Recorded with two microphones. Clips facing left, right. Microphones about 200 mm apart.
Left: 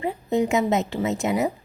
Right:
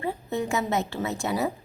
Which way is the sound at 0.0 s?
20° left (ahead or behind).